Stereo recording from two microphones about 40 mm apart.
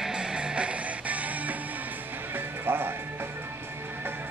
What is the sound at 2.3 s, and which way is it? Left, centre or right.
Music, right.